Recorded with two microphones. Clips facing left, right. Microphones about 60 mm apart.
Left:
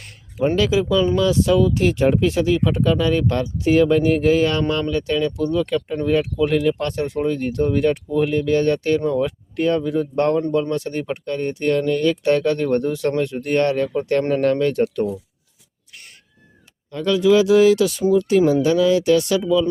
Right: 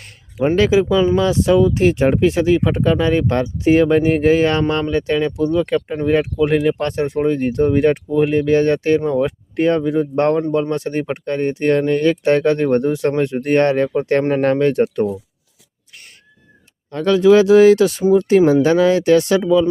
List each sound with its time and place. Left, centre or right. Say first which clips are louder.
0.5 s speech: right 5 dB; right
16.9 s speech: right 4 dB; right